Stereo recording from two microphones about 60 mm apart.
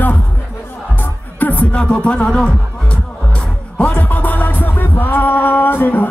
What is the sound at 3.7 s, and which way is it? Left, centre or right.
Music, left.